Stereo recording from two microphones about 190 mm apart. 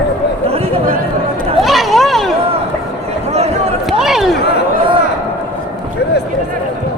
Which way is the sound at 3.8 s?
Centre (ahead or behind).